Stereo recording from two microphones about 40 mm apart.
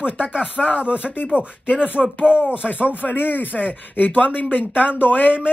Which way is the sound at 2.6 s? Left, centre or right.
Left.